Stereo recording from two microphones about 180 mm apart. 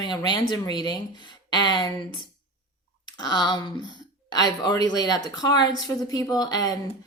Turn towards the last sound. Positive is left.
turn(degrees=20)  # may be behind; listen again after turning